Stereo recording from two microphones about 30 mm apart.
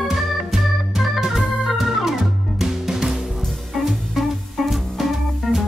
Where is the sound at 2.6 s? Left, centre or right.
Centre.